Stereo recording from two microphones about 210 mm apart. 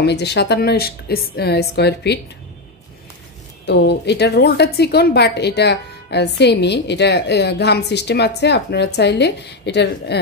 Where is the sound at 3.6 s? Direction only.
55° left (ahead or behind).